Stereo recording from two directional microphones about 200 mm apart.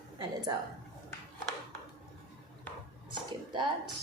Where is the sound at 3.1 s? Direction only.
25° right (ahead or behind).